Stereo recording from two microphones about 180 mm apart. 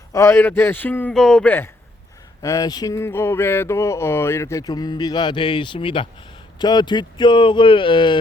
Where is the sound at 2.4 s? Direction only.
20° left (ahead or behind).